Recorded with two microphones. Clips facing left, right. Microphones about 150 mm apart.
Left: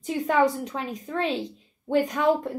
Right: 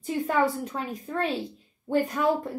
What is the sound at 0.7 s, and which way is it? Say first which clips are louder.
Speech: left 1 dB; 5° right (ahead or behind).